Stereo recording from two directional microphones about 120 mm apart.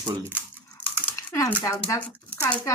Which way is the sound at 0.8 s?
40° right (ahead or behind).